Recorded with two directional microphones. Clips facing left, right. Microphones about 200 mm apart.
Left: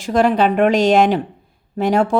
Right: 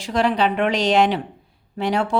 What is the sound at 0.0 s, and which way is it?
Speech, 45° left (ahead or behind).